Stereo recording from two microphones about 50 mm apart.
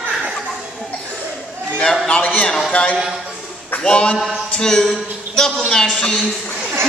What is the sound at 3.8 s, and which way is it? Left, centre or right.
Music, centre.